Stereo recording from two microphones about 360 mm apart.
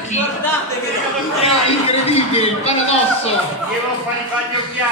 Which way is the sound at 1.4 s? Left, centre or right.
Centre.